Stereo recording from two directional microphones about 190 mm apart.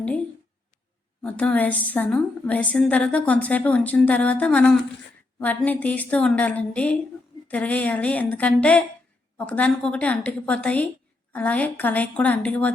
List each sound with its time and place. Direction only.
1.2 s a woman's voice: 5° left (ahead or behind)